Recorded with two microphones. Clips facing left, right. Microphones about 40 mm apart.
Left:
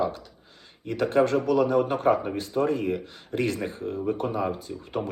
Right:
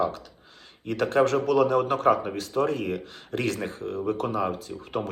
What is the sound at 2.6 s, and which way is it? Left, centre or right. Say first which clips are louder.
Speech: even; right.